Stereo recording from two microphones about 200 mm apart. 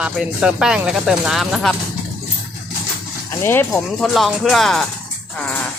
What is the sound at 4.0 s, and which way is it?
Speech, centre (ahead or behind).